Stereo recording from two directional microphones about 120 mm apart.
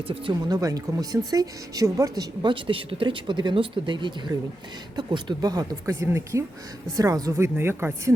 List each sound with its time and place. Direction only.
0.1 s speech: 40° right (ahead or behind); by 8.1 s 20° right (ahead or behind)